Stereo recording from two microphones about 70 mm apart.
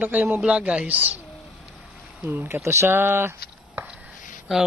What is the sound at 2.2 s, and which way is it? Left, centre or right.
A man's voice, right.